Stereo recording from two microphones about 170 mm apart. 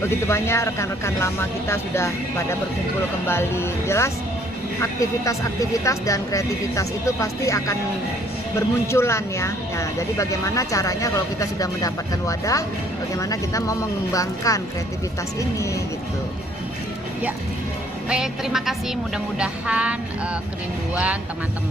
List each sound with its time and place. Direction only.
0.0 s speech: 15° left (ahead or behind)
18.1 s a woman's voice: 5° right (ahead or behind)
19.1 s music: 5° right (ahead or behind)